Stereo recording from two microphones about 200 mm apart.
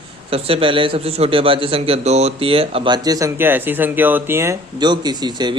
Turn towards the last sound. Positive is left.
turn(degrees=-20)  # may be behind; listen again after turning